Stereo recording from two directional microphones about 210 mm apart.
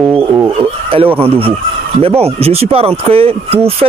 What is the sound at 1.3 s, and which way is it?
Speech, 25° right (ahead or behind).